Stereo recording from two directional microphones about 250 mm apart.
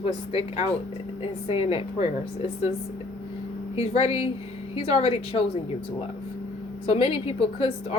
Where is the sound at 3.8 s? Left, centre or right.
Left.